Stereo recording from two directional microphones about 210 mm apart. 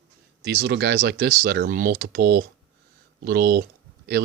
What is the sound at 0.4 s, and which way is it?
Speech, 50° right (ahead or behind).